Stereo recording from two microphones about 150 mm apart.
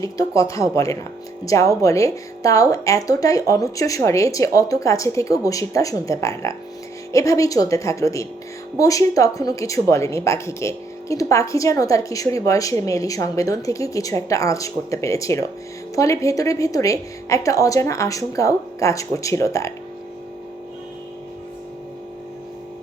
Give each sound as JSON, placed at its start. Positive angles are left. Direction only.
{"t": 0.0, "sound": "speech", "side_deg": 20}